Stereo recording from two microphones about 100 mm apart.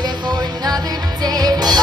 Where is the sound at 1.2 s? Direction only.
40° right (ahead or behind).